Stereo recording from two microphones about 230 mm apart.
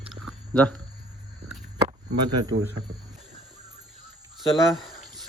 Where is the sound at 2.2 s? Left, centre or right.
Right.